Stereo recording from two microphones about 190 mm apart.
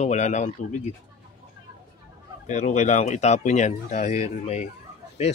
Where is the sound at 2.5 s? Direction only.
40° left (ahead or behind).